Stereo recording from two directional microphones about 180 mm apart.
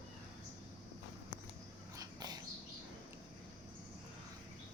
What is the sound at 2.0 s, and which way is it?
Dog, 20° right (ahead or behind).